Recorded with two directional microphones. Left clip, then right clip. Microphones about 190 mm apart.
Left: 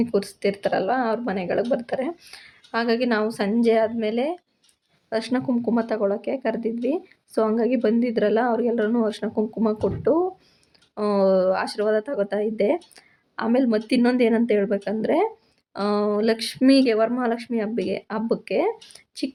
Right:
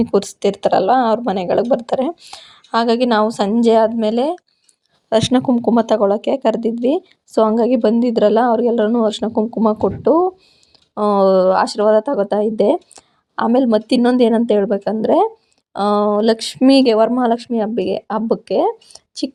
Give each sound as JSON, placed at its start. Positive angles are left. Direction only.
{"t": 0.0, "sound": "speech", "side_deg": -35}